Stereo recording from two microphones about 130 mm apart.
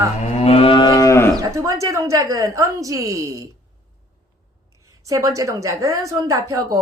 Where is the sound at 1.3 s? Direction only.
25° right (ahead or behind).